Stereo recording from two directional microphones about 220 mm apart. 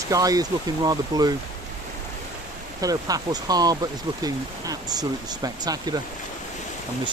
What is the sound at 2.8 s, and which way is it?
Speech, 15° right (ahead or behind).